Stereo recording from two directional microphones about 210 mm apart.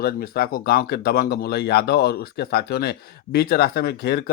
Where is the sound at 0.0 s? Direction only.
50° left (ahead or behind).